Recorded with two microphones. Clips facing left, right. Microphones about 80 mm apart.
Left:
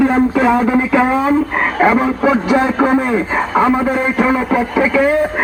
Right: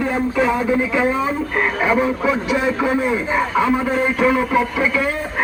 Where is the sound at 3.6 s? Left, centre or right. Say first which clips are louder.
Left 6 dB; left.